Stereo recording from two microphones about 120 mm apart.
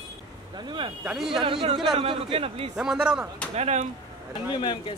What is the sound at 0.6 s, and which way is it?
Speech, 40° right (ahead or behind).